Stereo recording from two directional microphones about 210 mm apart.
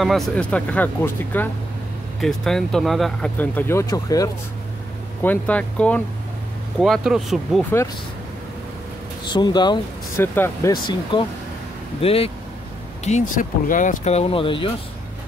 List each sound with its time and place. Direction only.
0.0 s speech: centre (ahead or behind)
9.3 s speech: 20° left (ahead or behind)